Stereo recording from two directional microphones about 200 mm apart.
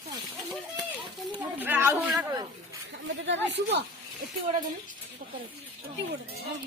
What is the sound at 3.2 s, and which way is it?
Speech, 60° right (ahead or behind).